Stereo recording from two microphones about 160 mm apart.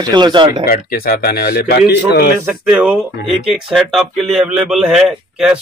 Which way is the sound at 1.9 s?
90° left.